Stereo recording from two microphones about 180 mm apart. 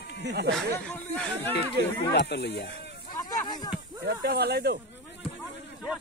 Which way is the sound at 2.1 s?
70° left (ahead or behind).